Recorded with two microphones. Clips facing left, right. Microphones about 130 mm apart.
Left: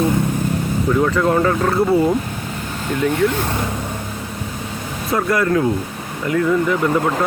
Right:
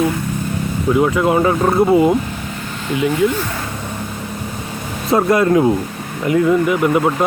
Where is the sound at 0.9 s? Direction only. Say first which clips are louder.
Right 2 dB; 15° right (ahead or behind).